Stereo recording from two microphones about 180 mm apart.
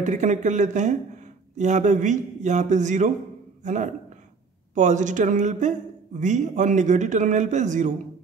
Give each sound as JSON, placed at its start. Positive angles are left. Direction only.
{"t": 0.0, "sound": "speech", "side_deg": -45}